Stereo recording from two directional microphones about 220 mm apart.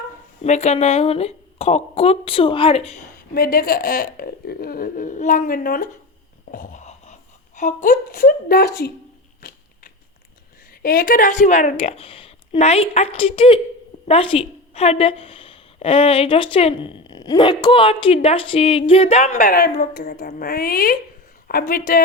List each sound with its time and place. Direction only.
0.4 s a woman's voice: 30° left (ahead or behind)
3.3 s speech: 45° left (ahead or behind)
10.8 s a woman's voice: 40° left (ahead or behind)